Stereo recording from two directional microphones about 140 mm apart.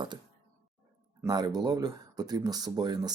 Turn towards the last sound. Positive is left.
turn(degrees=-30)  # may be behind; listen again after turning